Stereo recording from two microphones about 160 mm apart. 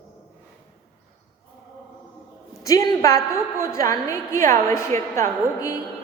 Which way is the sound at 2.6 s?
20° left (ahead or behind).